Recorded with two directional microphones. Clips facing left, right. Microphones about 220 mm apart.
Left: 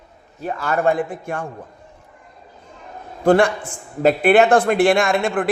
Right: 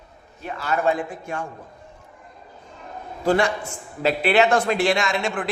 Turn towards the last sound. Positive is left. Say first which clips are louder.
# left 6 dB
turn(degrees=55)  # may be behind; listen again after turning